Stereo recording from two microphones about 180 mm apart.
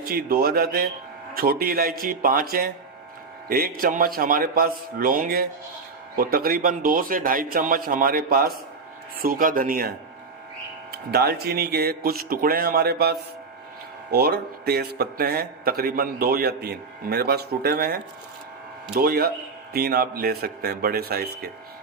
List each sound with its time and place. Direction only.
0.0 s a man's voice: 55° right (ahead or behind)
10.9 s speech: 60° right (ahead or behind)